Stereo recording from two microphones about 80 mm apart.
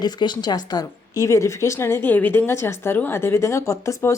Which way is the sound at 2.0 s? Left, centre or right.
Left.